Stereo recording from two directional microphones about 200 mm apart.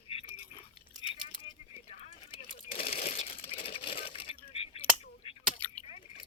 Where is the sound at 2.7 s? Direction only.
45° left (ahead or behind).